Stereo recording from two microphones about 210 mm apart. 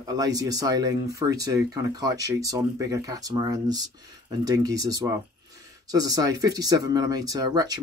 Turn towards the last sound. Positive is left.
turn(degrees=-20)  # may be behind; listen again after turning